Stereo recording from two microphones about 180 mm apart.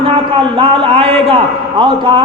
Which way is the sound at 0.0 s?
30° right (ahead or behind).